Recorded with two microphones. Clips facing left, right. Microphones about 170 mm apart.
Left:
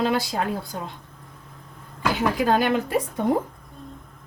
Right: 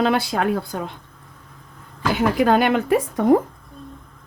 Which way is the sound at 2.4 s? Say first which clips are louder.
Right 4 dB; 65° right (ahead or behind).